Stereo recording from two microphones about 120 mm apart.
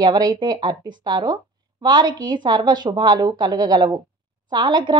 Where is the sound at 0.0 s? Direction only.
35° right (ahead or behind).